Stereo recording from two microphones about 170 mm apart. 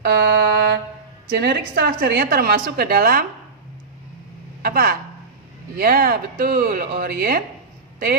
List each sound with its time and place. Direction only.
0.0 s a sound: 75° right (ahead or behind)
1.3 s a woman's voice: 65° right (ahead or behind)
4.6 s speech: 65° right (ahead or behind)